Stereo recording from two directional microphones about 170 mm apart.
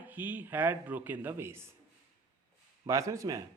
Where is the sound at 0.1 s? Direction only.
10° right (ahead or behind).